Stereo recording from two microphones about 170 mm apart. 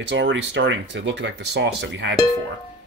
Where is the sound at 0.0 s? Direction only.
90° right.